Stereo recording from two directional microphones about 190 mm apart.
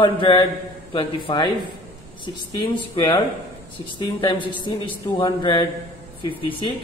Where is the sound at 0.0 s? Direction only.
25° left (ahead or behind).